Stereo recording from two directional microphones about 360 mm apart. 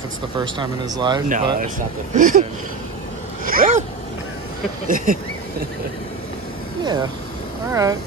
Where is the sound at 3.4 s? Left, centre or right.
Right.